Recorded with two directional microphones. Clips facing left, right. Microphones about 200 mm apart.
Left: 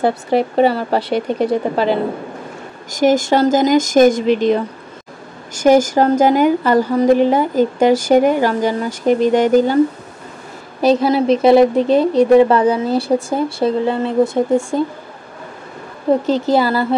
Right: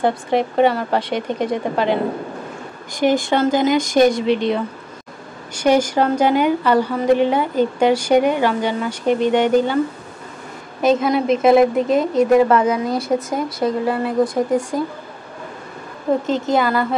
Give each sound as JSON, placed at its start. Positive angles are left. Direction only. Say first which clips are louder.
{"t": 0.6, "sound": "a woman's voice", "louder": "left 2 dB", "side_deg": 35}
{"t": 3.0, "sound": "a woman's voice", "louder": "left 3 dB", "side_deg": 45}
{"t": 5.5, "sound": "a woman's voice", "louder": "left 4 dB", "side_deg": 45}
{"t": 10.8, "sound": "a woman's voice", "louder": "left 3 dB", "side_deg": 35}
{"t": 16.3, "sound": "a woman's voice", "louder": "left 3 dB", "side_deg": 35}